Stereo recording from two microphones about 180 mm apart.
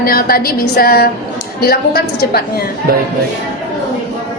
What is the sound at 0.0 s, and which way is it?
A woman's voice, 55° left (ahead or behind).